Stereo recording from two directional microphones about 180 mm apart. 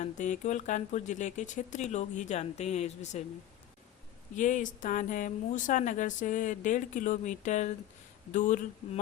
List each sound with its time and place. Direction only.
0.0 s speech: 40° left (ahead or behind)
4.4 s speech: 45° left (ahead or behind)